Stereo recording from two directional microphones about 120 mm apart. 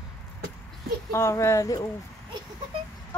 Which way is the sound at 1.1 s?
20° left (ahead or behind).